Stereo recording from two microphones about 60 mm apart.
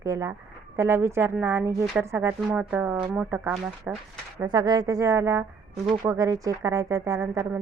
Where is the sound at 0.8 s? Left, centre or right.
Right.